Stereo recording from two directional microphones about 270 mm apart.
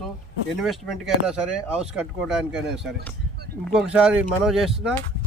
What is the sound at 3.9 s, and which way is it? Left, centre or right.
Speech, centre.